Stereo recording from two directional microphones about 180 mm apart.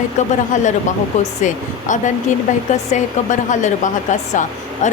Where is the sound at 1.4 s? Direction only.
45° left (ahead or behind).